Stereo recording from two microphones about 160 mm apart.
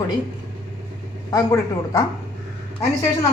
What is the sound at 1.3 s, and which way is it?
Speech, 25° left (ahead or behind).